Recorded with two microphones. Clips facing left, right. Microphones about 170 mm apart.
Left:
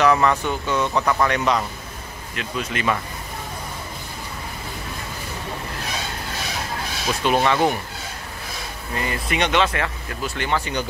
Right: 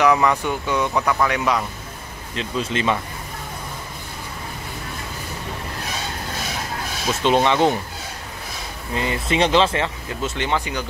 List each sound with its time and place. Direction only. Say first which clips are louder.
0.0 s speech: even; 10° right (ahead or behind)
2.3 s speech: right 3 dB; 30° right (ahead or behind)
7.2 s speech: right 2 dB; 20° right (ahead or behind)
8.9 s speech: right 3 dB; 20° right (ahead or behind)